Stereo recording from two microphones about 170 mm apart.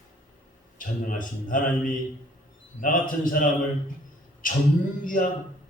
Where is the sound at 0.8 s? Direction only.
55° left (ahead or behind).